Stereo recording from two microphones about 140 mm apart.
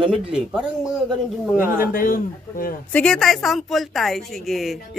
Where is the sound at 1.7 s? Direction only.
90° left.